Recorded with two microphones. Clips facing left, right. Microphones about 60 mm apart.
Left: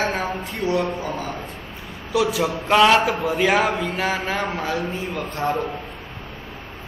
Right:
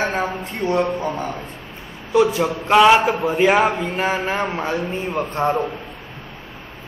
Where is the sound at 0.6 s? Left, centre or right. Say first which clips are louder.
Right 3 dB; right.